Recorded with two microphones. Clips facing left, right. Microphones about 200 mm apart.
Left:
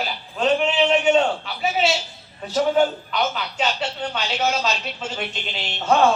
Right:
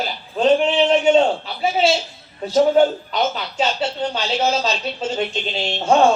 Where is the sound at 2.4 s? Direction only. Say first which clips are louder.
Right 5 dB; 30° right (ahead or behind).